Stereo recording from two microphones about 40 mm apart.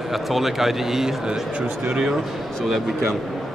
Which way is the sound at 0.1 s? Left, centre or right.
Centre.